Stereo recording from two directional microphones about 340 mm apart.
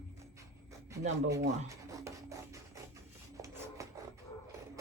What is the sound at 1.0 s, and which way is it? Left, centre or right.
Speech, right.